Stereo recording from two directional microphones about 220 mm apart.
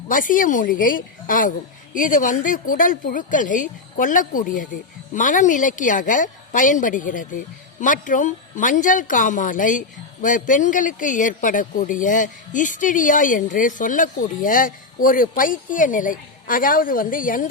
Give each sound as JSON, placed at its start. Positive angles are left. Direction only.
{"t": 0.1, "sound": "a woman's voice", "side_deg": 35}